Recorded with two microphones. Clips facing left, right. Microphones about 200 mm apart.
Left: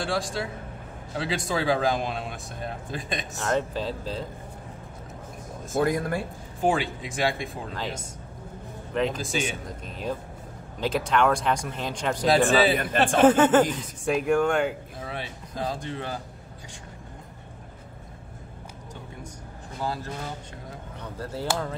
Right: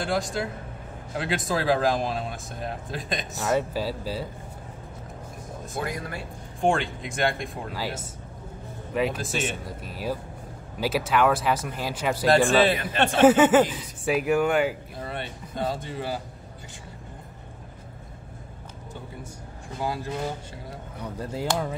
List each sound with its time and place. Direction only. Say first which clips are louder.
0.0 s speech: right 1 dB; centre (ahead or behind)
5.7 s speech: left 8 dB; 50° left (ahead or behind)
6.6 s speech: right 1 dB; 5° left (ahead or behind)
19.8 s speech: right 3 dB; 15° right (ahead or behind)